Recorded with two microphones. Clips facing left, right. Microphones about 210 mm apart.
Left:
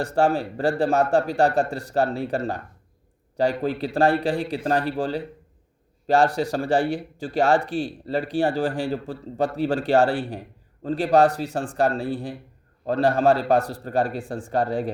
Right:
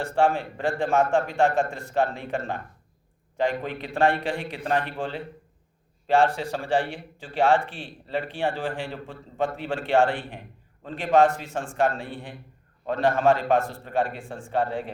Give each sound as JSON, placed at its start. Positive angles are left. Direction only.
{"t": 0.0, "sound": "speech", "side_deg": 40}